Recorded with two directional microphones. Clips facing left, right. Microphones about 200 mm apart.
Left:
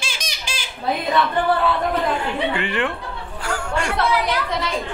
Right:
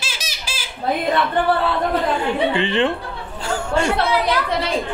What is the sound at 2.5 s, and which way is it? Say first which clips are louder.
Speech: right 4 dB; 25° right (ahead or behind).